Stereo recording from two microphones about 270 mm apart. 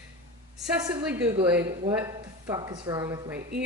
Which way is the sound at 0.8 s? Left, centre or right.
Centre.